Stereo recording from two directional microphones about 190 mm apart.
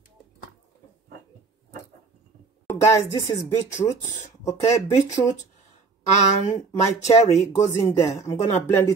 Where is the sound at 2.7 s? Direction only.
15° left (ahead or behind).